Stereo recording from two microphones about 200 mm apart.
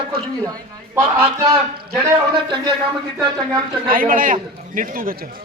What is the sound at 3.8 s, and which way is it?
A man's voice, 45° right (ahead or behind).